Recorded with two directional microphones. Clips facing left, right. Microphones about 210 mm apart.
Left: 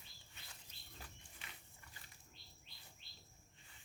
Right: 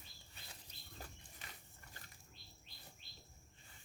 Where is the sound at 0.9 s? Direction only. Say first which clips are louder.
Right 4 dB; 40° right (ahead or behind).